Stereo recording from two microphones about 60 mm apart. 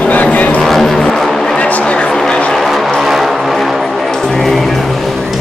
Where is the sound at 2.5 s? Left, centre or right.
Centre.